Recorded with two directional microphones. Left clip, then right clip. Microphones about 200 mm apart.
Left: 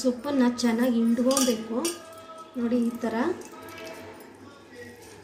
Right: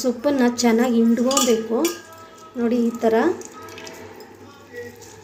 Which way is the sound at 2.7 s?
40° right (ahead or behind).